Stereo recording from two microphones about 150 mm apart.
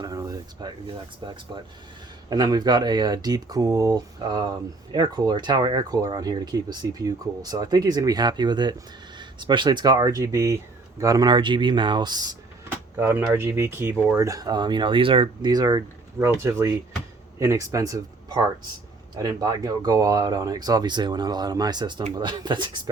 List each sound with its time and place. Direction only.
0.0 s speech: 25° right (ahead or behind)
12.6 s speech: 15° right (ahead or behind); by 22.8 s 30° right (ahead or behind)